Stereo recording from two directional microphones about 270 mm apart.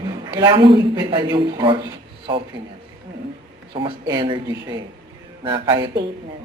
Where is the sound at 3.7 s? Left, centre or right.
Centre.